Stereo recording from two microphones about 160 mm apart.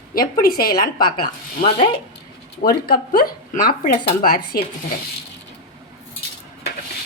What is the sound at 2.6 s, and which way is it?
Speech, 70° left (ahead or behind).